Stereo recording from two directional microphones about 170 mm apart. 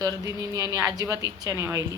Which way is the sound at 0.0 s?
20° right (ahead or behind).